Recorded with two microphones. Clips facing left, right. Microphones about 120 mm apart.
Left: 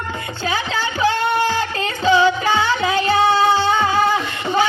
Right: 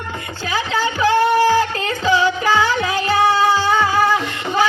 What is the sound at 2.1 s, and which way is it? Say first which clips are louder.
Music: left 2 dB; 25° left (ahead or behind).